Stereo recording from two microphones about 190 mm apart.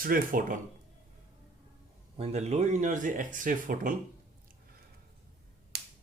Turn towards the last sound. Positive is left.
turn(degrees=-60)  # may be behind; listen again after turning